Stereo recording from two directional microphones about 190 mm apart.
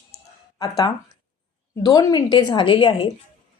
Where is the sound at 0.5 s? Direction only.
20° left (ahead or behind).